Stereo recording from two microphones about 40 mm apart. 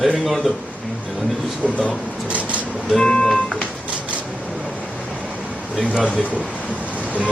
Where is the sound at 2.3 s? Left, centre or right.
Right.